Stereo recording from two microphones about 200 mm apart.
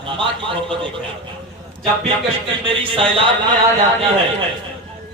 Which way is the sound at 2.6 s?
25° right (ahead or behind).